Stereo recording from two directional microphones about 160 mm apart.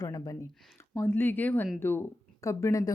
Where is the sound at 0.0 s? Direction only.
25° left (ahead or behind).